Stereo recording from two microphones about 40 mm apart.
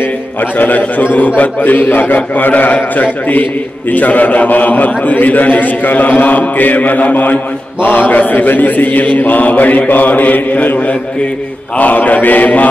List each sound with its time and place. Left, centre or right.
0.0 s a man's voice: left
7.8 s mantra: left
8.2 s speech: left